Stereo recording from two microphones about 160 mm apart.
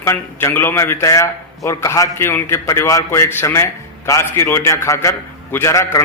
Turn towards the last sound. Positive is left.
turn(degrees=20)  # may be behind; listen again after turning